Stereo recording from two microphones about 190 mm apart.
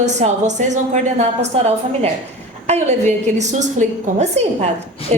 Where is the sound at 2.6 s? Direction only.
35° right (ahead or behind).